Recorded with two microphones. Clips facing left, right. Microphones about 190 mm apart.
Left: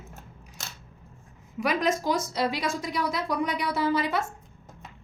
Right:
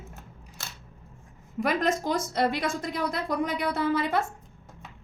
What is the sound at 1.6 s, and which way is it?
A woman's voice, 55° right (ahead or behind).